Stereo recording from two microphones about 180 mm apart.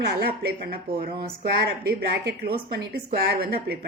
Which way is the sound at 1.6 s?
60° right (ahead or behind).